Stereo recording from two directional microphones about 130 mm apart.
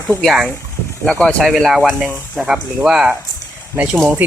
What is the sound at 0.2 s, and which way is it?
Speech, 5° left (ahead or behind).